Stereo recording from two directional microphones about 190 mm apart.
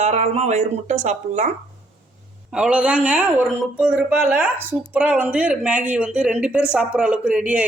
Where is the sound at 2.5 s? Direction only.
5° right (ahead or behind).